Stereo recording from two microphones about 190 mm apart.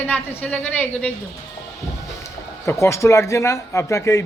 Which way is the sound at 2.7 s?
15° left (ahead or behind).